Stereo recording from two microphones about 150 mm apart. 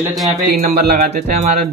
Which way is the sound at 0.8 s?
90° right.